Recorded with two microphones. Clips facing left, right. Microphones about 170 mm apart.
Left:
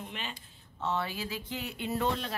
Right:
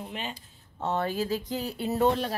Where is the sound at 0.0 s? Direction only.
40° right (ahead or behind).